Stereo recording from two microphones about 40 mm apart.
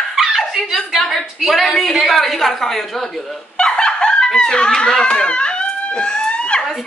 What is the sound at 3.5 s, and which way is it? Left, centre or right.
Snicker, left.